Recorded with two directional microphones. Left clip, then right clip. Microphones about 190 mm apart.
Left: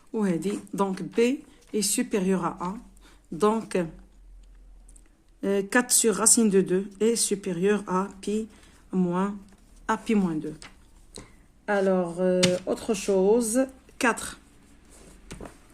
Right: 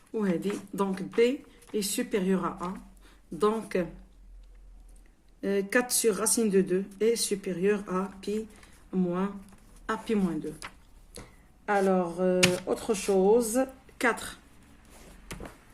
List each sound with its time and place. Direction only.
0.1 s speech: 45° left (ahead or behind)
5.4 s speech: 50° left (ahead or behind)